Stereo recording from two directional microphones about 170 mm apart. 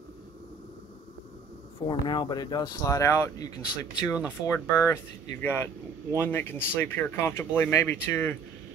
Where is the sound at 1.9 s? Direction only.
25° left (ahead or behind).